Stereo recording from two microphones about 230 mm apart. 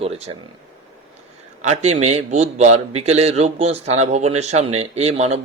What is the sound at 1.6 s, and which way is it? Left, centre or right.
A man's voice, right.